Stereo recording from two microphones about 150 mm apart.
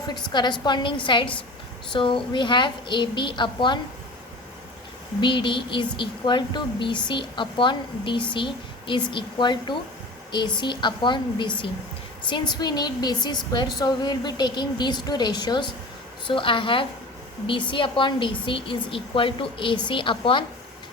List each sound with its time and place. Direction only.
0.1 s a woman's voice: 30° left (ahead or behind)
5.2 s a woman's voice: 35° left (ahead or behind)